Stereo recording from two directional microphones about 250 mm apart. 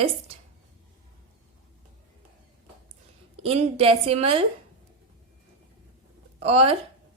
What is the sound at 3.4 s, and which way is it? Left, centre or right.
Speech, right.